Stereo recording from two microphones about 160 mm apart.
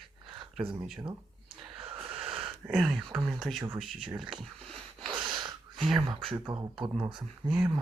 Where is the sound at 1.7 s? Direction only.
35° right (ahead or behind).